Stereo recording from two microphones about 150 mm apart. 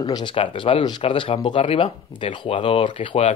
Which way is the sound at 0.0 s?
30° left (ahead or behind).